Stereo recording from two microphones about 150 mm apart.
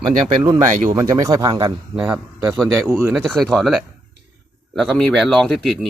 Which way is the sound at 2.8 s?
15° right (ahead or behind).